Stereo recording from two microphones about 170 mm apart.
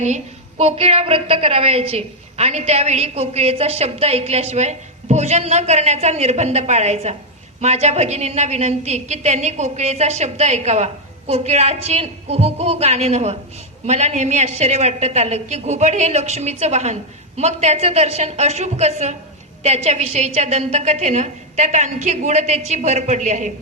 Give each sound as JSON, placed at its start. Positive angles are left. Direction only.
{"t": 0.6, "sound": "a woman's voice", "side_deg": -35}